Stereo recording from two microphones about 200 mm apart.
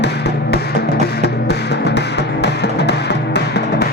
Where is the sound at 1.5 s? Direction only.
55° left (ahead or behind).